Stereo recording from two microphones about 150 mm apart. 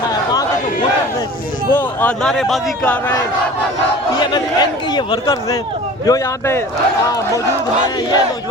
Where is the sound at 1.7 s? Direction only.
10° left (ahead or behind).